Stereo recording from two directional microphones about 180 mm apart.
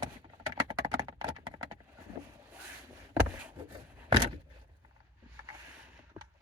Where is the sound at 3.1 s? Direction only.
5° right (ahead or behind).